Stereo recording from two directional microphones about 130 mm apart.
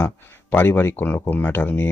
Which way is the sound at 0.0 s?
15° left (ahead or behind).